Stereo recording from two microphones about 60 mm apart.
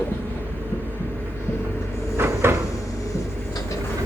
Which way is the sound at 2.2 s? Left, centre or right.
Right.